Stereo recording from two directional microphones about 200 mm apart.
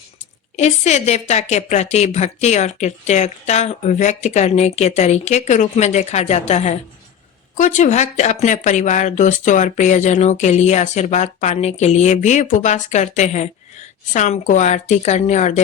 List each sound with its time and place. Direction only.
0.5 s a woman's voice: 35° left (ahead or behind)